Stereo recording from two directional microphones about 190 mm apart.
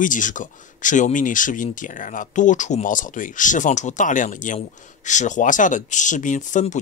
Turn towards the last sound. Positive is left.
turn(degrees=40)  # may be behind; listen again after turning